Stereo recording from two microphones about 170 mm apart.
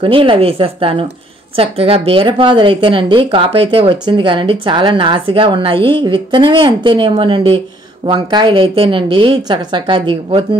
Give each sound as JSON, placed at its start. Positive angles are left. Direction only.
{"t": 0.0, "sound": "speech", "side_deg": -30}